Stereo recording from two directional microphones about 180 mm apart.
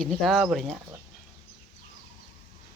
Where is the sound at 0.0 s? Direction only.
Centre (ahead or behind).